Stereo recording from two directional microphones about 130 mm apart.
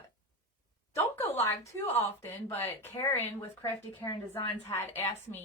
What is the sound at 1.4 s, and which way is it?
A woman's voice, 25° left (ahead or behind).